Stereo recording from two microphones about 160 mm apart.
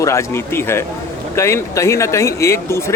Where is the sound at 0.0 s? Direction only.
20° left (ahead or behind).